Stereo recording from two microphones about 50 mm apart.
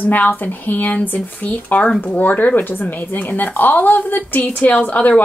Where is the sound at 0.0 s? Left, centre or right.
Left.